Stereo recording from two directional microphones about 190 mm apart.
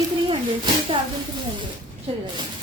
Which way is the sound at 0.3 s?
25° right (ahead or behind).